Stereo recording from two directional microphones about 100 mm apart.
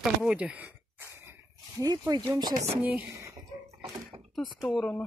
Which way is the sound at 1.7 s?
35° right (ahead or behind).